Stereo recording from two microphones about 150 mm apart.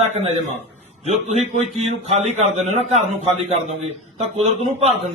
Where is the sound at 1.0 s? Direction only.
45° right (ahead or behind).